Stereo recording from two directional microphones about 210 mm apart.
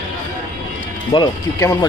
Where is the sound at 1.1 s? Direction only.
15° left (ahead or behind).